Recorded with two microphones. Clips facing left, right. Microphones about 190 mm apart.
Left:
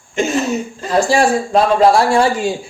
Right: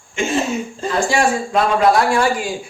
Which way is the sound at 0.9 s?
35° left (ahead or behind).